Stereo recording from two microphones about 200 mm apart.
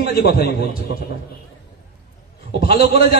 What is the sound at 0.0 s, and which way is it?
Speech, 50° left (ahead or behind).